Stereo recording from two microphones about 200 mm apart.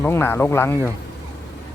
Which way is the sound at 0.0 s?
10° left (ahead or behind).